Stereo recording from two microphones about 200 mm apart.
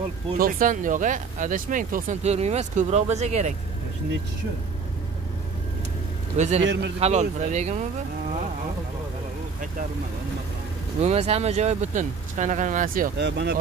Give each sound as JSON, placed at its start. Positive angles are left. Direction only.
{"t": 0.4, "sound": "speech", "side_deg": -45}
{"t": 6.3, "sound": "a man's voice", "side_deg": -35}
{"t": 6.6, "sound": "speech", "side_deg": -65}
{"t": 7.0, "sound": "speech", "side_deg": -35}
{"t": 11.0, "sound": "speech", "side_deg": -35}